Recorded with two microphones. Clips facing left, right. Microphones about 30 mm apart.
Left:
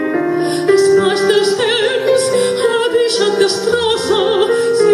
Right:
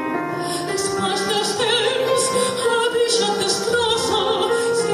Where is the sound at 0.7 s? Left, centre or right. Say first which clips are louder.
Left 17 dB; left.